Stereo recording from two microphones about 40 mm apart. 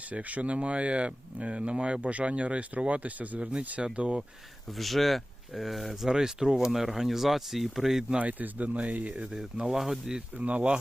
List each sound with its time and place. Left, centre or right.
0.1 s speech: right
3.9 s speech: right
4.8 s speech: centre
6.1 s speech: centre
8.2 s speech: right
9.3 s speech: centre
10.2 s speech: right